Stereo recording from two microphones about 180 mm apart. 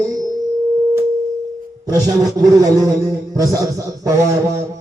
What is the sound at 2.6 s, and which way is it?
A man's voice, 20° right (ahead or behind).